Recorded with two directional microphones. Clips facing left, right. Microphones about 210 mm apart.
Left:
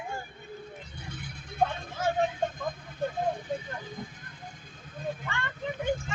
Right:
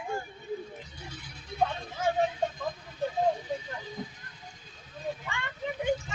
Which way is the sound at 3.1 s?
50° left (ahead or behind).